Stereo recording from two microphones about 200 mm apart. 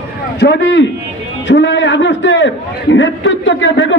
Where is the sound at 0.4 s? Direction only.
60° left (ahead or behind).